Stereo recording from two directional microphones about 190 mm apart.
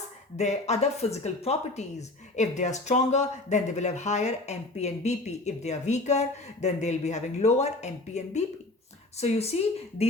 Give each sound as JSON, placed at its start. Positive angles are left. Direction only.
{"t": 0.3, "sound": "speech", "side_deg": 35}